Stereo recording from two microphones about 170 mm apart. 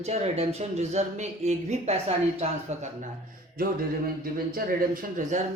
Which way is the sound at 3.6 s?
60° right (ahead or behind).